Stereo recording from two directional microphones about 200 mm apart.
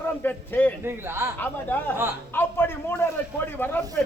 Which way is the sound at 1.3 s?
10° left (ahead or behind).